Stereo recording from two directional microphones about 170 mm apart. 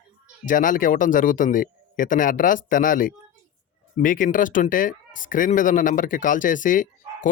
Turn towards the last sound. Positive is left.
turn(degrees=50)  # may be behind; listen again after turning